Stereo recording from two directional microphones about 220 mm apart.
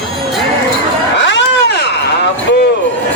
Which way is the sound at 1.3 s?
50° left (ahead or behind).